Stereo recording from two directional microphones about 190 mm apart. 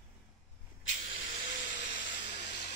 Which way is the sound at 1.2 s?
80° left.